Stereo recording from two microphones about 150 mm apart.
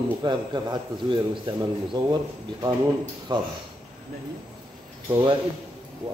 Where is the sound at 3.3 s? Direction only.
30° right (ahead or behind).